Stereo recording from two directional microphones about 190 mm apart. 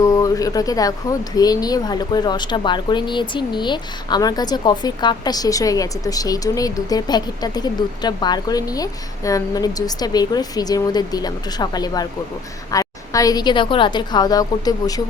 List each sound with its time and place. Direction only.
0.0 s speech: 15° left (ahead or behind)